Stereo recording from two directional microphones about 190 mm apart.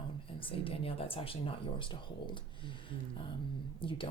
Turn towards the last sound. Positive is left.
turn(degrees=25)  # may be behind; listen again after turning